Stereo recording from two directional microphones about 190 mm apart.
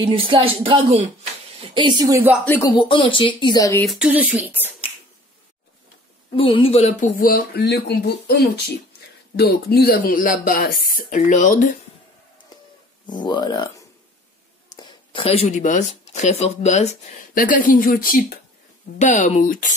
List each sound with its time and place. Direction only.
0.0 s a woman's voice: 25° right (ahead or behind)
2.4 s speech: 10° left (ahead or behind)
2.7 s speech: 25° left (ahead or behind)
3.8 s speech: centre (ahead or behind)
6.3 s speech: 25° left (ahead or behind); by 11.7 s 45° left (ahead or behind)
13.0 s speech: 20° left (ahead or behind); by 19.7 s 45° left (ahead or behind)